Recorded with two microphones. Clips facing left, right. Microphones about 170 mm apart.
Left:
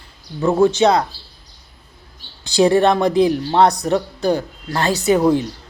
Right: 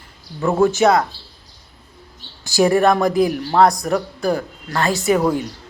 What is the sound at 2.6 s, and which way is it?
Speech, 30° left (ahead or behind).